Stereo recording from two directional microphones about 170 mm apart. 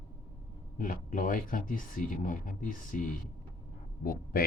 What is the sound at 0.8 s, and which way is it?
Speech, 50° left (ahead or behind).